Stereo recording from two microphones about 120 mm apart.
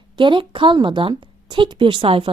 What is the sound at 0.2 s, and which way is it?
A woman's voice, 45° right (ahead or behind).